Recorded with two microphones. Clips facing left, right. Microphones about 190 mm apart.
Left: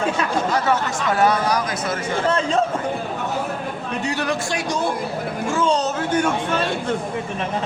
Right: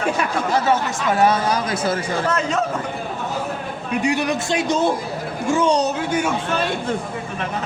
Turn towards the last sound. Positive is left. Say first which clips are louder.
# even
turn(degrees=-10)  # may be behind; listen again after turning